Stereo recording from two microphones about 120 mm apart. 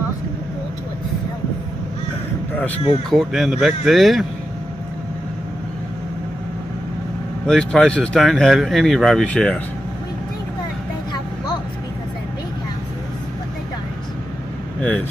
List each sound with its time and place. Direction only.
3.1 s speech: centre (ahead or behind)
7.4 s speech: 5° left (ahead or behind)
14.8 s speech: 10° left (ahead or behind)